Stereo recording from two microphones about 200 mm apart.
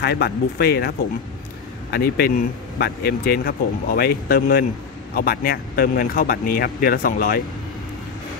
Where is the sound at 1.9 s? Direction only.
50° left (ahead or behind).